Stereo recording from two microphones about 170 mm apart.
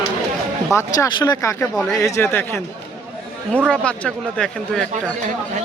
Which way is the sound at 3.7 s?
5° left (ahead or behind).